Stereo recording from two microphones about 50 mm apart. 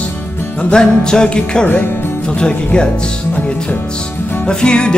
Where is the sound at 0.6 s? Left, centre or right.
Centre.